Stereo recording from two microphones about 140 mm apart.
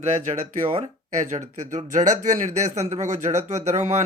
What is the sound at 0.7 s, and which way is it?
Speech, 55° right (ahead or behind).